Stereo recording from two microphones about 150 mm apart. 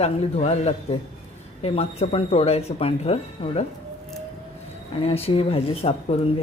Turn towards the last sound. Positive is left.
turn(degrees=40)  # may be behind; listen again after turning